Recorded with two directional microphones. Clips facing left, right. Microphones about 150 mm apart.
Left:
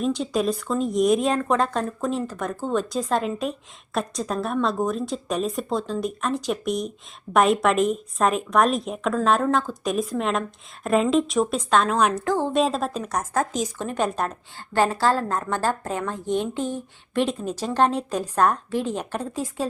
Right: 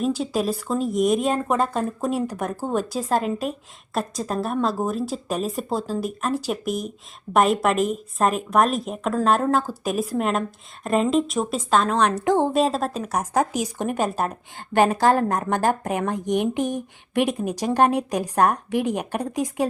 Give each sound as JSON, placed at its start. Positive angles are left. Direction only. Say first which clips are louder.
{"t": 0.0, "sound": "a woman's voice", "louder": "even", "side_deg": -5}
{"t": 12.2, "sound": "speech", "louder": "right 4 dB", "side_deg": -20}
{"t": 12.5, "sound": "a woman's voice", "louder": "right 1 dB", "side_deg": 0}
{"t": 14.5, "sound": "a woman's voice", "louder": "right 3 dB", "side_deg": -20}